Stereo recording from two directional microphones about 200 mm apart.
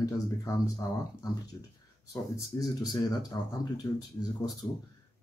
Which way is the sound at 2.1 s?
15° left (ahead or behind).